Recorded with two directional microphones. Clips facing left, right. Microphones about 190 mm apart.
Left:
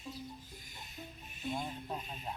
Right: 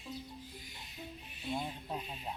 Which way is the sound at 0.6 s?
45° left (ahead or behind).